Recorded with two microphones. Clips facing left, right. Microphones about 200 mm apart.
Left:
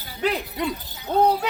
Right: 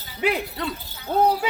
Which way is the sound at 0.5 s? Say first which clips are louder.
Left 3 dB; 15° left (ahead or behind).